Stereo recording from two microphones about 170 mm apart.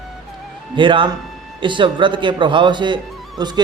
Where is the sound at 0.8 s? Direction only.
30° right (ahead or behind).